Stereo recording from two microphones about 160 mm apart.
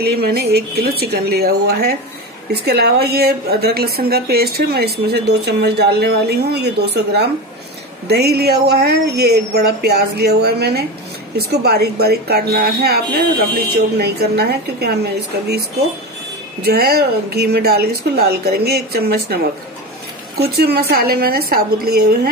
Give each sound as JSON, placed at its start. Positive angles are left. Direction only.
{"t": 0.0, "sound": "a woman's voice", "side_deg": -80}
{"t": 2.5, "sound": "a woman's voice", "side_deg": -85}
{"t": 16.6, "sound": "a woman's voice", "side_deg": -75}